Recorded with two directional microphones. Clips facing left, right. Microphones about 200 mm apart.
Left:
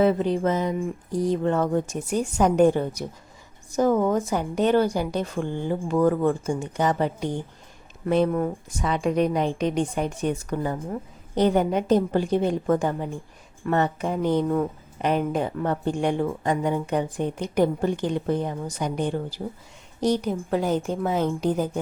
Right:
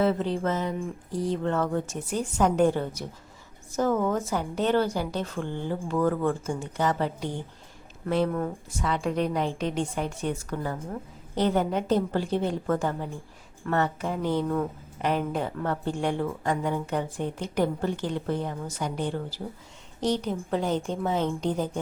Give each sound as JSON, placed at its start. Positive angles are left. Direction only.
{"t": 0.0, "sound": "a woman's voice", "side_deg": 15}